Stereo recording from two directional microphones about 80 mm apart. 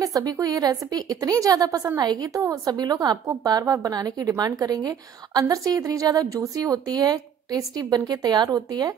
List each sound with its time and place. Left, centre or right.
0.0 s a woman's voice: right